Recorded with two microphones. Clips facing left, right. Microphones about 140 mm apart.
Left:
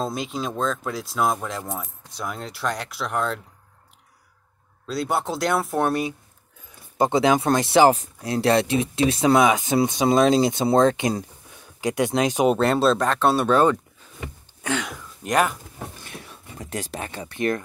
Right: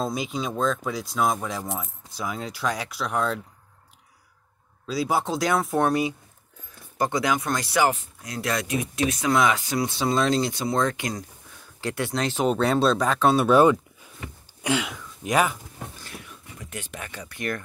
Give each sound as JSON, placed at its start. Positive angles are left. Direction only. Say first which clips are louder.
{"t": 0.0, "sound": "speech", "louder": "left 1 dB", "side_deg": 0}
{"t": 4.8, "sound": "speech", "louder": "even", "side_deg": 0}
{"t": 7.0, "sound": "speech", "louder": "left 5 dB", "side_deg": 25}
{"t": 12.5, "sound": "speech", "louder": "left 2 dB", "side_deg": 0}
{"t": 13.5, "sound": "speech", "louder": "right 2 dB", "side_deg": -10}
{"t": 14.6, "sound": "a sound", "louder": "right 1 dB", "side_deg": -10}
{"t": 15.0, "sound": "speech", "louder": "left 1 dB", "side_deg": 0}
{"t": 16.2, "sound": "a sound", "louder": "left 4 dB", "side_deg": 35}